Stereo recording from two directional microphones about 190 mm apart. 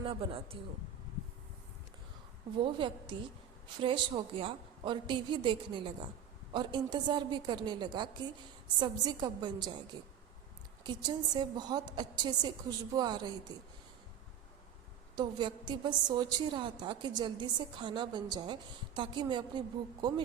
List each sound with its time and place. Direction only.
0.0 s a woman's voice: 30° right (ahead or behind)
2.6 s a woman's voice: 25° right (ahead or behind)
10.8 s a woman's voice: 20° right (ahead or behind)
15.1 s a woman's voice: 25° right (ahead or behind)